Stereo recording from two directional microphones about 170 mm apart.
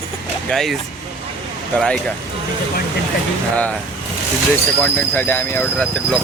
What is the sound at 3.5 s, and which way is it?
Speech, 10° left (ahead or behind).